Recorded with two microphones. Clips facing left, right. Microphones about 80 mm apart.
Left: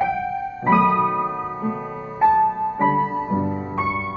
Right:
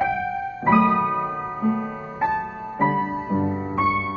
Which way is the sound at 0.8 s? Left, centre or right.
Centre.